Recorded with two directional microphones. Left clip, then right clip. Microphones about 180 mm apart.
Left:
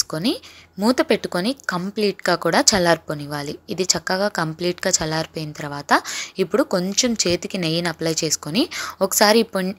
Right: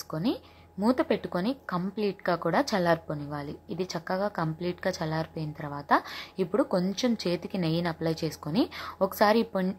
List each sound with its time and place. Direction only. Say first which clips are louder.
0.1 s speech: left 7 dB; 30° left (ahead or behind)